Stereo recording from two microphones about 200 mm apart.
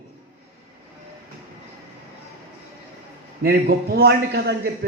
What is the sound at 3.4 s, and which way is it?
A man's voice, 50° right (ahead or behind).